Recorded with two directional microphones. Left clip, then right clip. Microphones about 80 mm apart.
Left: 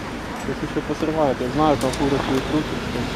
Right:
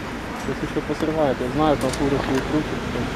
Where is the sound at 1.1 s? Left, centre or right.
Centre.